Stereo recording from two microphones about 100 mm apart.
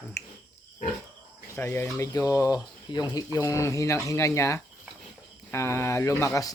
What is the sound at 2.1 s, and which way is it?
Speech, 35° left (ahead or behind).